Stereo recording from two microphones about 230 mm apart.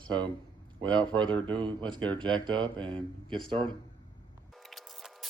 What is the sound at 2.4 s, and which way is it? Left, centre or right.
Speech, centre.